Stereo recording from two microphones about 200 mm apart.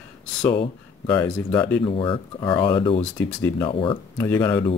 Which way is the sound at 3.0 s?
15° left (ahead or behind).